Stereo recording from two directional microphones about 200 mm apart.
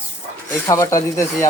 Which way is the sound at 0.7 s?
15° left (ahead or behind).